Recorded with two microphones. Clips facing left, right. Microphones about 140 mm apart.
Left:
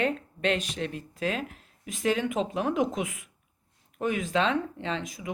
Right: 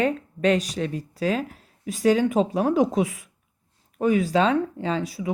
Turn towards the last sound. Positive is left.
turn(degrees=-35)  # may be behind; listen again after turning